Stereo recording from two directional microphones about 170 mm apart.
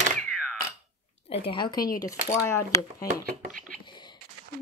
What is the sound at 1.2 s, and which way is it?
Speech, 35° left (ahead or behind).